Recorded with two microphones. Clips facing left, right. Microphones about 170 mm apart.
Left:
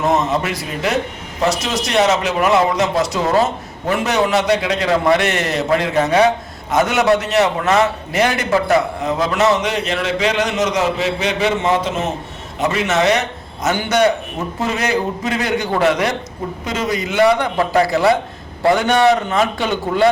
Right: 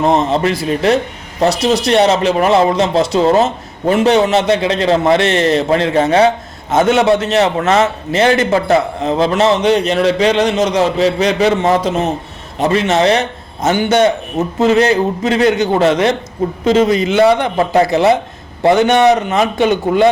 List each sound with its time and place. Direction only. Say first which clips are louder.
0.0 s a man's voice: right 4 dB; 30° right (ahead or behind)